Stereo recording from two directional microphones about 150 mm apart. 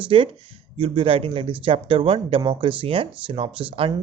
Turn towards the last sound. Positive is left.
turn(degrees=-35)  # may be behind; listen again after turning